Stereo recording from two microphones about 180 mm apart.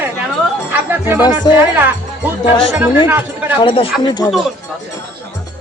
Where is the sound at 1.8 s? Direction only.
10° right (ahead or behind).